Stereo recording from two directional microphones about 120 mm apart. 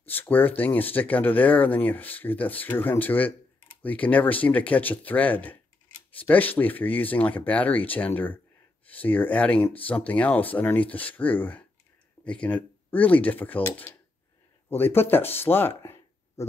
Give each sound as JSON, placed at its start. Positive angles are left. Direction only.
{"t": 0.1, "sound": "speech", "side_deg": 15}